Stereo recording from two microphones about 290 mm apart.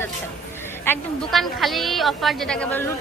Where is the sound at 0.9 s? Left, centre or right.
Centre.